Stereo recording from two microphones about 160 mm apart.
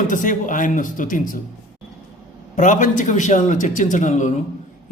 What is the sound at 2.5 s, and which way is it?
A man's voice, 50° left (ahead or behind).